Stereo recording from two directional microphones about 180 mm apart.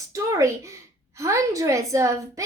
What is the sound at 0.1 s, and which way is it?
A woman's voice, 15° right (ahead or behind).